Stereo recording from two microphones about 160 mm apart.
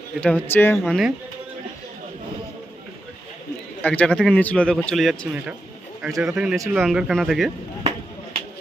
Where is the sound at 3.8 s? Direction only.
10° left (ahead or behind).